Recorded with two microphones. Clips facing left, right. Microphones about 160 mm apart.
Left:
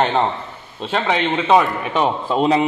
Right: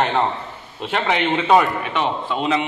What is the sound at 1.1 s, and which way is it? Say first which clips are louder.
Speech: even; 5° right (ahead or behind).